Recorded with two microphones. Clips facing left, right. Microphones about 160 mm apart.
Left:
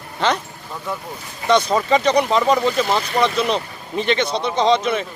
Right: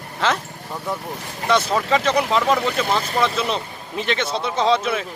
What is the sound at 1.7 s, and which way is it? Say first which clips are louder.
Speech: left 3 dB; centre (ahead or behind).